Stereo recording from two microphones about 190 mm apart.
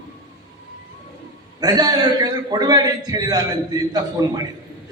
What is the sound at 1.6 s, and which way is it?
A man's voice, 20° right (ahead or behind).